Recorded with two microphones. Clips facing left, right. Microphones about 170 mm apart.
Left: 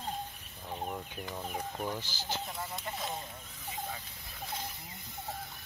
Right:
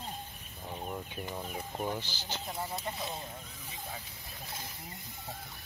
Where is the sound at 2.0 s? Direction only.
10° left (ahead or behind).